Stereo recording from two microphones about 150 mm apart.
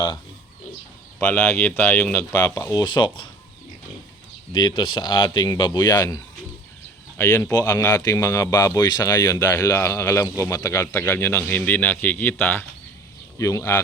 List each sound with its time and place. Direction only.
1.2 s speech: 10° left (ahead or behind)
2.7 s speech: 30° left (ahead or behind)
4.5 s speech: 30° left (ahead or behind)